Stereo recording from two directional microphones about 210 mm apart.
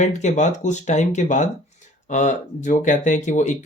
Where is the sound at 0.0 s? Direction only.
35° left (ahead or behind).